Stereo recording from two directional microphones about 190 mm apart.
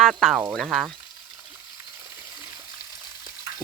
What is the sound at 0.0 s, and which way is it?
Speech, centre (ahead or behind).